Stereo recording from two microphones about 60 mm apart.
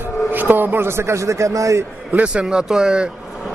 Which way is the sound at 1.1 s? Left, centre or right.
Right.